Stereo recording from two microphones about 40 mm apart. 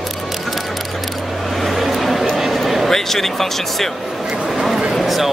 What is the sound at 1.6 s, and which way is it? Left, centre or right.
Vehicle, centre.